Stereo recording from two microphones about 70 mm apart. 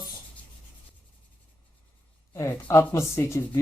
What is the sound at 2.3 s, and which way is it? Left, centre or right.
Speech, left.